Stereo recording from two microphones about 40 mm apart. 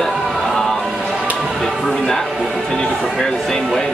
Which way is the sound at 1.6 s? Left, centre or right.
Centre.